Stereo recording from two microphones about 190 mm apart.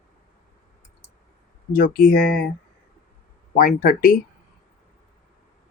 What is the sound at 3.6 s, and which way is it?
Speech, 45° left (ahead or behind).